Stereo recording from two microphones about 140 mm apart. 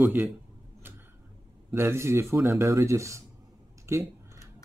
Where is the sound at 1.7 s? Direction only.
15° right (ahead or behind).